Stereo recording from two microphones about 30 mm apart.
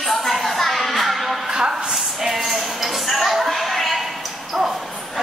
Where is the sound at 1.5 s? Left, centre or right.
Right.